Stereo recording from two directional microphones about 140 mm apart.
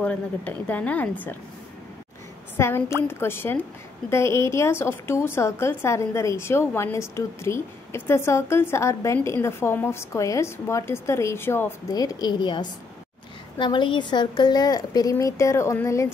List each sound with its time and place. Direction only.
0.0 s speech: 10° left (ahead or behind)
2.5 s a woman's voice: 20° left (ahead or behind)
11.9 s a woman's voice: 25° left (ahead or behind)